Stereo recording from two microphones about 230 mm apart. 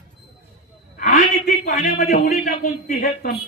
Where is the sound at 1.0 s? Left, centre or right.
Left.